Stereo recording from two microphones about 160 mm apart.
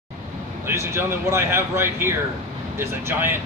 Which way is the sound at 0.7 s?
15° right (ahead or behind).